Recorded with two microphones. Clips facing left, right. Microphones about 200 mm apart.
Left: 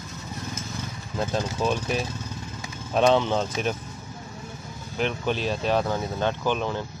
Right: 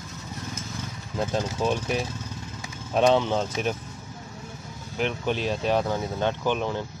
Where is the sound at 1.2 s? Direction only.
20° right (ahead or behind).